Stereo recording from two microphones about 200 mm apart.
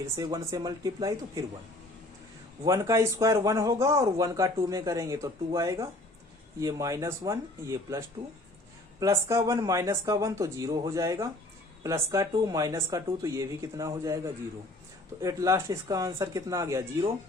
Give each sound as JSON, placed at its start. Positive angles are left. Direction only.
{"t": 0.0, "sound": "speech", "side_deg": -20}
{"t": 2.6, "sound": "speech", "side_deg": -15}
{"t": 15.2, "sound": "speech", "side_deg": -15}